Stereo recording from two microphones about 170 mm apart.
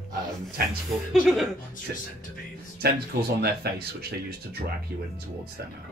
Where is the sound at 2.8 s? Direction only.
65° right (ahead or behind).